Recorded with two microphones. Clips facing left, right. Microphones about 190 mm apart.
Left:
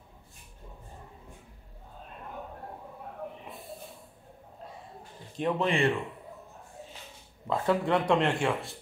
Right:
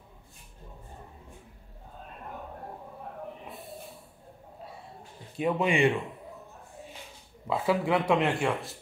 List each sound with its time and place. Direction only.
5.4 s speech: 5° right (ahead or behind)
5.7 s a man's voice: 15° right (ahead or behind)
7.4 s speech: 5° right (ahead or behind)